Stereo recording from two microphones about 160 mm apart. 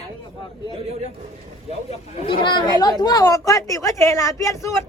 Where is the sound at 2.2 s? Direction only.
30° left (ahead or behind).